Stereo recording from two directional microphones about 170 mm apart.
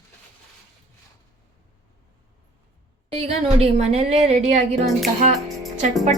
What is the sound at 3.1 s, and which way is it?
A woman's voice, 40° right (ahead or behind).